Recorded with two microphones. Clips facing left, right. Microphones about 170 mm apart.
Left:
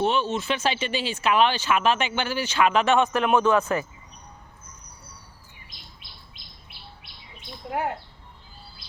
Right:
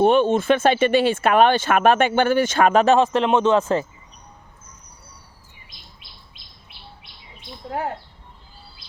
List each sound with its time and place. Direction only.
0.0 s speech: 50° right (ahead or behind); by 3.8 s 25° right (ahead or behind)